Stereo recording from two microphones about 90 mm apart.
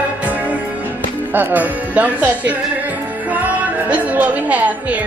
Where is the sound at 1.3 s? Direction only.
20° right (ahead or behind).